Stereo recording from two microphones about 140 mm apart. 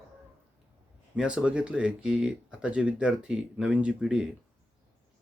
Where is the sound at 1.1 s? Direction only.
5° right (ahead or behind).